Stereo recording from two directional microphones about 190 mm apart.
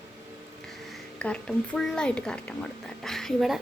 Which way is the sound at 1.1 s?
5° left (ahead or behind).